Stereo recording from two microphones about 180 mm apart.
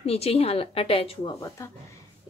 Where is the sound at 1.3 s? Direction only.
15° left (ahead or behind).